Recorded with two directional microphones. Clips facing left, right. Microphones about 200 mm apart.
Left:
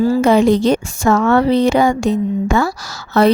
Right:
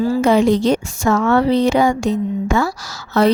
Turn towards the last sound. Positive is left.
turn(degrees=60)  # may be behind; listen again after turning